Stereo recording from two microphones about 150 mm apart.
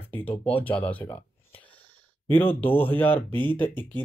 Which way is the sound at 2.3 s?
10° left (ahead or behind).